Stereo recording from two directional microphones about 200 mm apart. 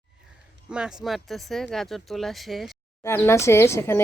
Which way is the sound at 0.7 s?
5° right (ahead or behind).